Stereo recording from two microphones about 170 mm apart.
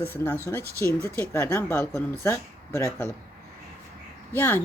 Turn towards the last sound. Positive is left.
turn(degrees=10)  # may be behind; listen again after turning